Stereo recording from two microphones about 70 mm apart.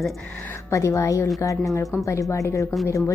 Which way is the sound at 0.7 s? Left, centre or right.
Left.